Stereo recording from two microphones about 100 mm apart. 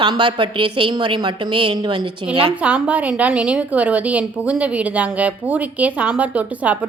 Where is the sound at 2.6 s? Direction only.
10° right (ahead or behind).